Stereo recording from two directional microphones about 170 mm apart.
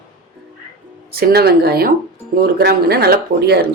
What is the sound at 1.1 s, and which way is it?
A woman's voice, 65° right (ahead or behind).